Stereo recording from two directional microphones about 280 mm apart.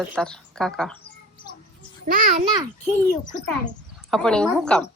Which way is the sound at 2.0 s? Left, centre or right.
Right.